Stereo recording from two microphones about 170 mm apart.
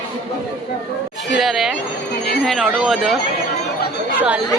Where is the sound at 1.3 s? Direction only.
Centre (ahead or behind).